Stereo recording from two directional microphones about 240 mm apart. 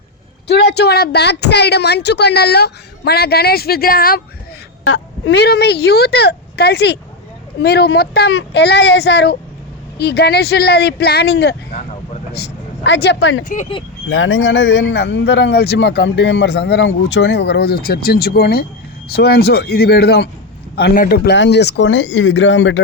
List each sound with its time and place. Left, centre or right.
0.4 s a man's voice: left
4.8 s a woman's voice: left
13.4 s speech: left
14.1 s a man's voice: left